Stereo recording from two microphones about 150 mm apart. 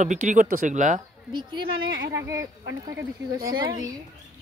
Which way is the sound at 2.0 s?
20° right (ahead or behind).